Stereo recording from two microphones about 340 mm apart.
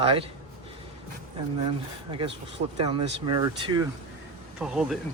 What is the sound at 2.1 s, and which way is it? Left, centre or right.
Speech, centre.